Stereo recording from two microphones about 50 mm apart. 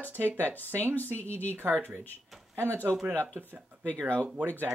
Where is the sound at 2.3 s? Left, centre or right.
Centre.